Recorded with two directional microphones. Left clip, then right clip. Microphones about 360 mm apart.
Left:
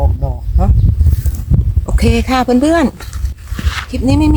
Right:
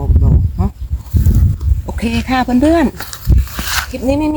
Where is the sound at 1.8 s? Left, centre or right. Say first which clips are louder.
Left 3 dB; centre.